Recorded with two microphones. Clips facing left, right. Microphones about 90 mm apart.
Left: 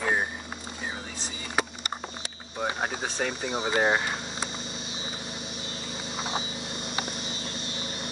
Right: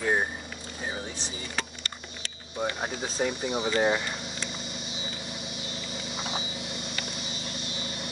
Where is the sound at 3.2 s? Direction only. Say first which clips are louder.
Right 3 dB; 90° left.